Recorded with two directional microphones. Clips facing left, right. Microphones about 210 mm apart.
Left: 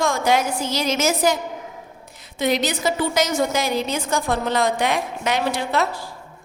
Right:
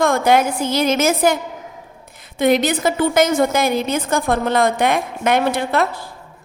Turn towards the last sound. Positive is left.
turn(degrees=-55)  # may be behind; listen again after turning